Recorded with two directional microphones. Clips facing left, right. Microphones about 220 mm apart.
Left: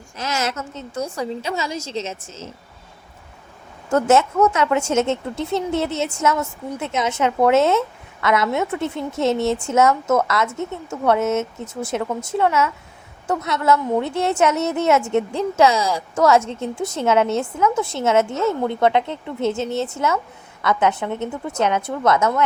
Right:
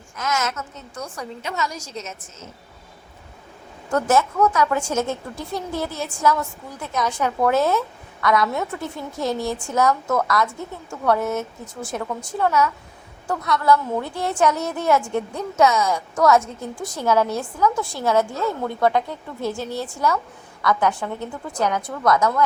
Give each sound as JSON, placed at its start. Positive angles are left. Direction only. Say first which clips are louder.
{"t": 0.2, "sound": "a woman's voice", "louder": "left 1 dB", "side_deg": 30}
{"t": 3.9, "sound": "a woman's voice", "louder": "left 3 dB", "side_deg": 25}